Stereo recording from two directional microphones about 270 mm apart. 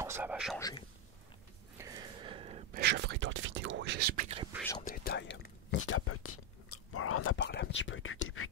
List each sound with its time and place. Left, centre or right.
0.0 s speech: centre
0.6 s speech: centre
1.8 s a sound: centre
2.7 s speech: right
4.8 s speech: left